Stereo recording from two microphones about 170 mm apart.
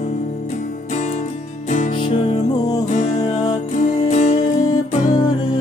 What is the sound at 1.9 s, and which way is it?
Music, 30° left (ahead or behind).